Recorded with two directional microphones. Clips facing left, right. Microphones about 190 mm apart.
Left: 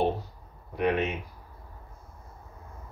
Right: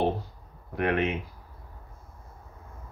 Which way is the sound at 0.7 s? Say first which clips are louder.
Even; 60° right (ahead or behind).